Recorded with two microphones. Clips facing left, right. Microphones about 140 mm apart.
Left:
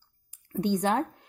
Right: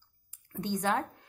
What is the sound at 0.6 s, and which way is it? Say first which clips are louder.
Speech: left 5 dB; 20° left (ahead or behind).